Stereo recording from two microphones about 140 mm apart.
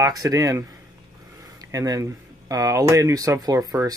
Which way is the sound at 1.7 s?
25° right (ahead or behind).